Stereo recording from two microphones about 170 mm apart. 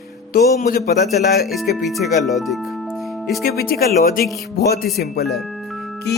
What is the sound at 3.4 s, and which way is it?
Speech, 65° left (ahead or behind).